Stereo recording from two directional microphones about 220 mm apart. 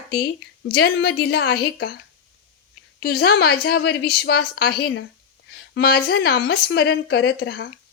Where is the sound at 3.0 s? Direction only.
45° left (ahead or behind).